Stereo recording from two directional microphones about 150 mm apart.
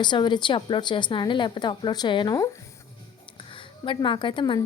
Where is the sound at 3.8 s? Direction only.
35° left (ahead or behind).